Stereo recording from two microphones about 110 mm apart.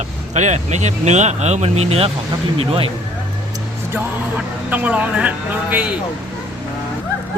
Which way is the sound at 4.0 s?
15° right (ahead or behind).